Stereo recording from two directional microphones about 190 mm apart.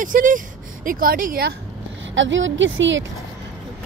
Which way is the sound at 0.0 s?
45° right (ahead or behind).